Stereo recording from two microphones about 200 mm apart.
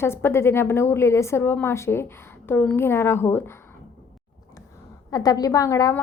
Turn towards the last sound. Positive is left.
turn(degrees=15)  # may be behind; listen again after turning